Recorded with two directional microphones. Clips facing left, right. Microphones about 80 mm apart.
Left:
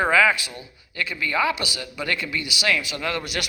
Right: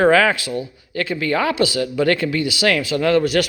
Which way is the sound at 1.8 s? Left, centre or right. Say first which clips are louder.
Right 11 dB; right.